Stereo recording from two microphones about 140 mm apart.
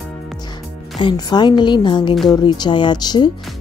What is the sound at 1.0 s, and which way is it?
Speech, 35° left (ahead or behind).